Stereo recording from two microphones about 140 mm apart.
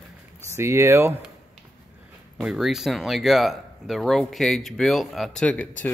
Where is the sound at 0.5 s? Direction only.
20° right (ahead or behind).